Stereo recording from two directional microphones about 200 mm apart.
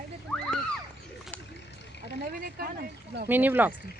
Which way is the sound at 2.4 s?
50° right (ahead or behind).